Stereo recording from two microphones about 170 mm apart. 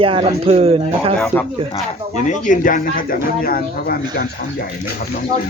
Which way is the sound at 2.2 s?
45° left (ahead or behind).